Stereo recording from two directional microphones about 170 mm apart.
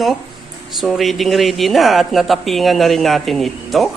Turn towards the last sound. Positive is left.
turn(degrees=0)  # may be behind; listen again after turning